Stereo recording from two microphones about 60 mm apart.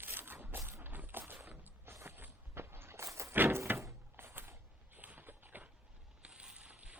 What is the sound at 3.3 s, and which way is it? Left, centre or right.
Door, right.